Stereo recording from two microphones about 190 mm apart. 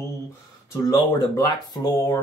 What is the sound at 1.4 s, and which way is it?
Speech, 20° left (ahead or behind).